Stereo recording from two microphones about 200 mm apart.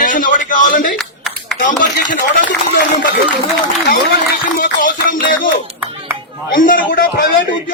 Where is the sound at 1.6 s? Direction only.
40° left (ahead or behind).